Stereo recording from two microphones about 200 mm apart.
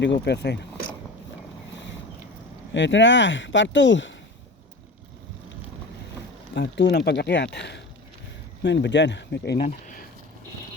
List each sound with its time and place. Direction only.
0.0 s speech: 60° left (ahead or behind)
1.7 s boat: 65° left (ahead or behind)
2.7 s speech: 65° left (ahead or behind)
6.5 s speech: 60° left (ahead or behind)
9.6 s a sound: 35° left (ahead or behind)